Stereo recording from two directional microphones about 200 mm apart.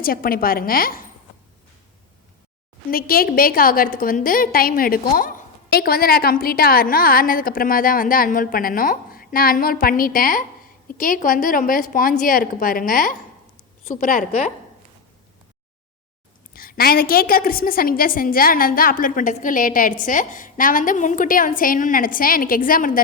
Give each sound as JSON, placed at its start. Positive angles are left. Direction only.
{"t": 0.0, "sound": "a woman's voice", "side_deg": 45}
{"t": 2.9, "sound": "a woman's voice", "side_deg": 50}
{"t": 16.5, "sound": "a woman's voice", "side_deg": 45}